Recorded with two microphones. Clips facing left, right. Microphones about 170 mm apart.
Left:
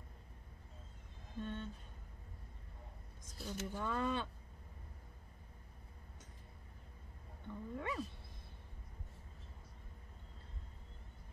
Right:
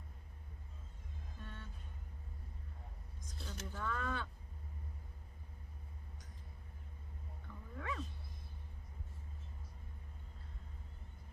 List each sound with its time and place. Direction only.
1.4 s speech: 25° left (ahead or behind)
3.3 s speech: 10° left (ahead or behind)
3.8 s speech: 20° left (ahead or behind)
7.4 s speech: 25° left (ahead or behind)